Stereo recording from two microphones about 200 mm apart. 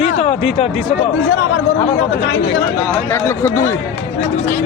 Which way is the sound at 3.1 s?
15° left (ahead or behind).